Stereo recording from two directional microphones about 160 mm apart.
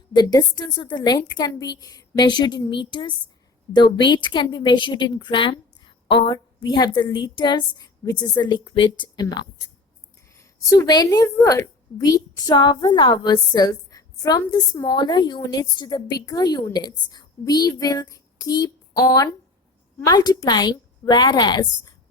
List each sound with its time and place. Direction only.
0.1 s a woman's voice: 25° left (ahead or behind)